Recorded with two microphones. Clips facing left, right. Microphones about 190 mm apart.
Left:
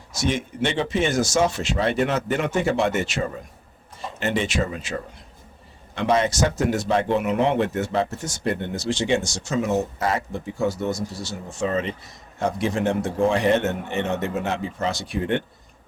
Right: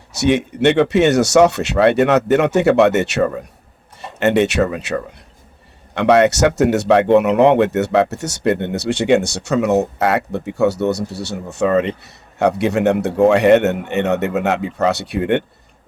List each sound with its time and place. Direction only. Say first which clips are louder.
0.1 s a man's voice: right 9 dB; 70° right (ahead or behind)